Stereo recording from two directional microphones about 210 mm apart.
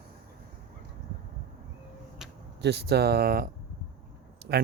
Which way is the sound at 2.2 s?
Centre (ahead or behind).